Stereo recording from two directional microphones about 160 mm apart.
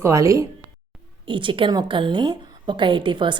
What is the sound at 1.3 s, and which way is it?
A woman's voice, 30° right (ahead or behind).